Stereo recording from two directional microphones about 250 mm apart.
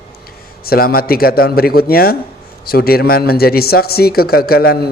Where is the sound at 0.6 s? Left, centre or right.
Left.